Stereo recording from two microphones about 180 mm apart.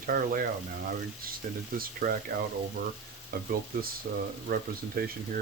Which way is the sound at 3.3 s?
60° right (ahead or behind).